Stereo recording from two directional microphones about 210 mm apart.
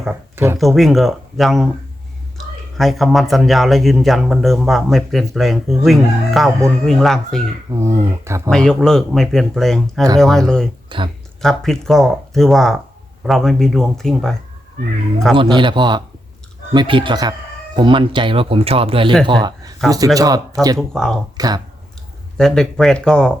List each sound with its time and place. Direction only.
0.0 s speech: 10° right (ahead or behind)
0.6 s speech: centre (ahead or behind)
2.7 s speech: centre (ahead or behind)
7.7 s speech: 15° right (ahead or behind)
8.4 s speech: 5° left (ahead or behind)
10.8 s speech: 25° right (ahead or behind)
11.4 s speech: centre (ahead or behind)
15.4 s speech: 20° right (ahead or behind)
20.7 s speech: centre (ahead or behind)
21.3 s speech: 20° right (ahead or behind)
22.4 s speech: 5° left (ahead or behind)